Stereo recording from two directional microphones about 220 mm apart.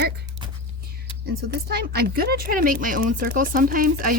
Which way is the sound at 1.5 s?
45° right (ahead or behind).